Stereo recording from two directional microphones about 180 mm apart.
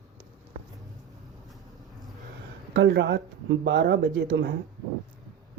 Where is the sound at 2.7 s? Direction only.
70° right (ahead or behind).